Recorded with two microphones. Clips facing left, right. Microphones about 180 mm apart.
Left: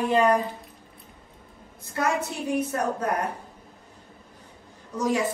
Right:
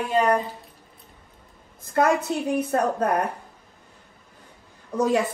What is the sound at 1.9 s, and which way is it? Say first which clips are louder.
Speech: right 6 dB; 60° right (ahead or behind).